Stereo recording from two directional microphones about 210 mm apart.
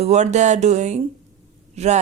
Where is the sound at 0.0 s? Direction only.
30° right (ahead or behind).